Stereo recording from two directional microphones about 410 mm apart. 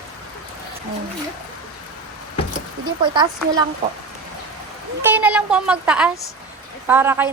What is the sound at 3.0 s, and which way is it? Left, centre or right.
Speech, centre.